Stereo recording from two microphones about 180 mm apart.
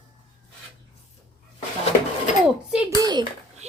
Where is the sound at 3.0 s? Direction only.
25° right (ahead or behind).